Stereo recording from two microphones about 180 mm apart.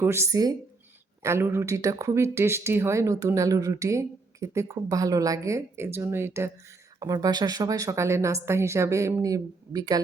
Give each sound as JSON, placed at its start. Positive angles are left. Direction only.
{"t": 0.0, "sound": "speech", "side_deg": -15}